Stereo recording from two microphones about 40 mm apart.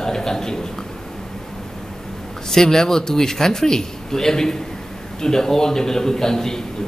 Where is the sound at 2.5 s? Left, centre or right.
Centre.